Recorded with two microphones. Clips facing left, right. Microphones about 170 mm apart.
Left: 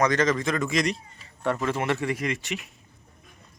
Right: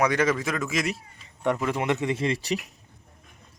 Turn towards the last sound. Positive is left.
turn(degrees=-35)  # may be behind; listen again after turning